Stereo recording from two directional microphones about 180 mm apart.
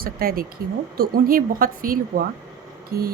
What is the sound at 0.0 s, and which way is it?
A woman's voice, 55° right (ahead or behind).